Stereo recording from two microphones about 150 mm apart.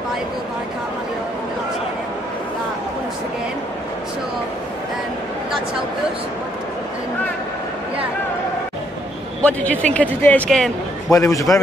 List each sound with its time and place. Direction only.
9.4 s speech: 10° left (ahead or behind)
11.1 s a man's voice: 20° left (ahead or behind)